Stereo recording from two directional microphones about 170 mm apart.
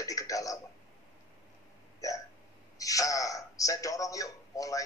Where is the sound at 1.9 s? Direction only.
20° left (ahead or behind).